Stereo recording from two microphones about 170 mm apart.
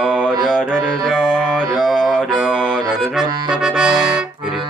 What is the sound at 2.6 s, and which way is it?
Accordion, centre (ahead or behind).